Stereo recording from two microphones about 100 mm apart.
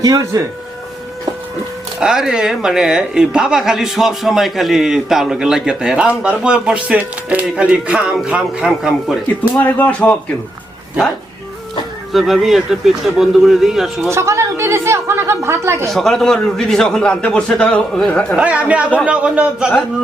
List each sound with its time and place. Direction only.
0.0 s speech: 35° right (ahead or behind)
2.0 s a woman's voice: 5° right (ahead or behind)
9.4 s a man's voice: 15° left (ahead or behind)
12.1 s a woman's voice: centre (ahead or behind)
14.1 s a woman's voice: 30° right (ahead or behind)
15.9 s a man's voice: 5° left (ahead or behind)
18.3 s speech: 15° right (ahead or behind)